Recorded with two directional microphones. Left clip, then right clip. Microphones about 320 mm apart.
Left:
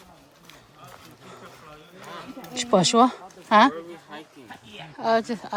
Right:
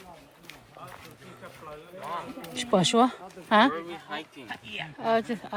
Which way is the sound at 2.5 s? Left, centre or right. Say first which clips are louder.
Left 4 dB; centre.